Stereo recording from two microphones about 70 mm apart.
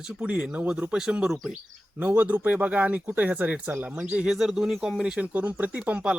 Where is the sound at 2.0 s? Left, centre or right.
Right.